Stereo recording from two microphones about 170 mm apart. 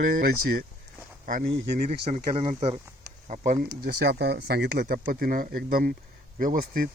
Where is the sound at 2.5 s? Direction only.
40° right (ahead or behind).